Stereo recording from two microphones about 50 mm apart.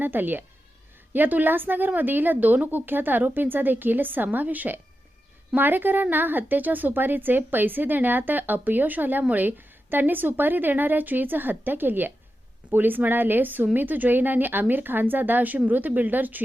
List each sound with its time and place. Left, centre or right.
0.0 s speech: right